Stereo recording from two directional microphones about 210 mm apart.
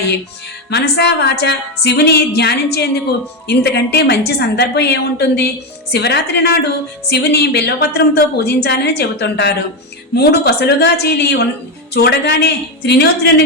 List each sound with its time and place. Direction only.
0.7 s a woman's voice: 50° left (ahead or behind)